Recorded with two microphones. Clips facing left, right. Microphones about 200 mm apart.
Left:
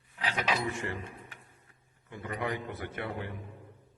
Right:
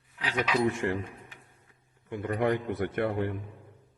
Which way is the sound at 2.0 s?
55° right (ahead or behind).